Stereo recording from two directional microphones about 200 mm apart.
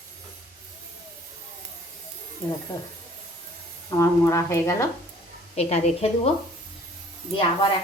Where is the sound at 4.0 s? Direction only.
15° left (ahead or behind).